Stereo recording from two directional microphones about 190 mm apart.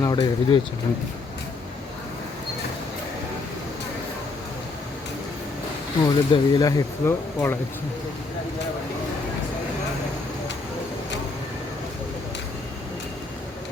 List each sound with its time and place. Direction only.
0.0 s speech: 20° left (ahead or behind)
6.1 s speech: 25° left (ahead or behind)